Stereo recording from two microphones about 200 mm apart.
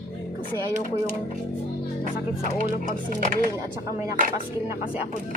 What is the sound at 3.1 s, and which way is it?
Speech, 45° right (ahead or behind).